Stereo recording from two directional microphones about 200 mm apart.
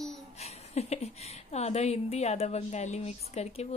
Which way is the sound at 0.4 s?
30° left (ahead or behind).